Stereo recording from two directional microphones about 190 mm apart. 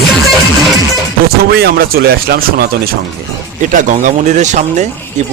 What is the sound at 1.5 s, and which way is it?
Speech, 55° right (ahead or behind).